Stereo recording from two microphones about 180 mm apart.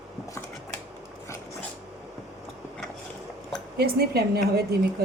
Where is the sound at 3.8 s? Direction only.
60° right (ahead or behind).